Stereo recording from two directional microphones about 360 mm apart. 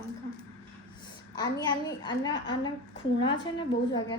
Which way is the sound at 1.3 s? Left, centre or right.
Centre.